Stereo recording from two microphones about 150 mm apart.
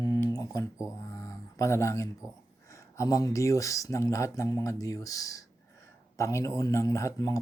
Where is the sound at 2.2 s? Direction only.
5° right (ahead or behind).